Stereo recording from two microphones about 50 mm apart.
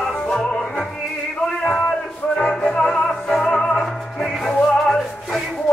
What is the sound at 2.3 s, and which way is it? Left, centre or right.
Music, centre.